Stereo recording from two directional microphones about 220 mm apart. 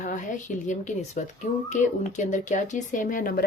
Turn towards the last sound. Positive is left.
turn(degrees=40)  # may be behind; listen again after turning